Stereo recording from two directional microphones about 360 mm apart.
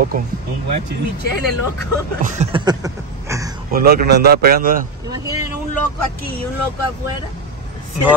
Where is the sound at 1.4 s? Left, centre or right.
Right.